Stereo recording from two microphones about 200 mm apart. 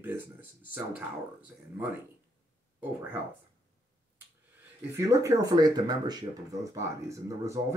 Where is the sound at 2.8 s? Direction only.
10° right (ahead or behind).